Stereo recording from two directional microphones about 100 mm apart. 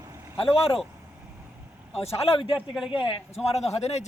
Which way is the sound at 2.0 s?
90° left.